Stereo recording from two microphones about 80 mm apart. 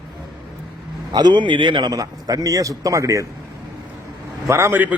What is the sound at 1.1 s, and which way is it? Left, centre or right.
Speech, right.